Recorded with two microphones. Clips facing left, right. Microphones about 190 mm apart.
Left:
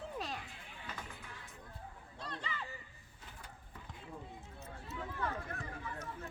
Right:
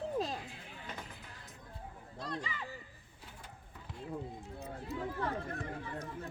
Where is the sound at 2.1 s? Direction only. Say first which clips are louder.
Right 5 dB; 10° right (ahead or behind).